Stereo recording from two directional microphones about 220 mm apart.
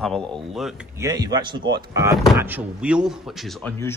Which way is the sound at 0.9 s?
15° right (ahead or behind).